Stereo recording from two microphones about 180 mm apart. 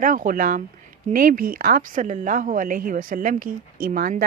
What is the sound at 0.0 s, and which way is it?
Speech, 50° right (ahead or behind).